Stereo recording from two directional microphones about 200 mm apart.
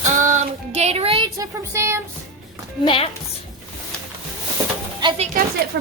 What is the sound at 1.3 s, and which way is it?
Speech, 15° right (ahead or behind).